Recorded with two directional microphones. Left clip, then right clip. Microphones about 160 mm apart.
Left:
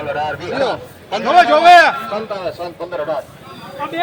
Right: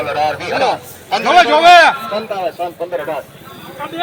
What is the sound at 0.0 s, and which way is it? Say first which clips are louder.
Speech: right 4 dB; 15° right (ahead or behind).